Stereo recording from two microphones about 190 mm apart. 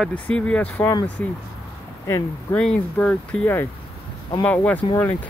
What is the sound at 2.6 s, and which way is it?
Speech, 5° left (ahead or behind).